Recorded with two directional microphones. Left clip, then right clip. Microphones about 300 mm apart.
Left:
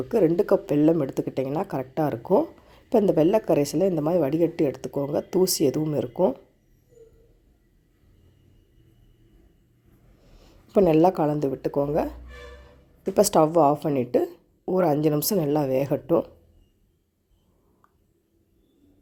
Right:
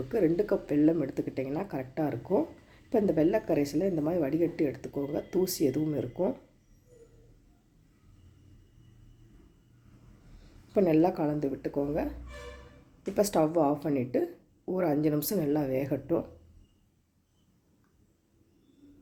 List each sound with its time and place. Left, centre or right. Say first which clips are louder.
0.1 s speech: left 7 dB; left
10.4 s speech: left 7 dB; left
13.1 s speech: left 7 dB; left